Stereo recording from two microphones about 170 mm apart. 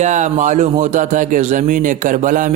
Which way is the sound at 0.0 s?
45° right (ahead or behind).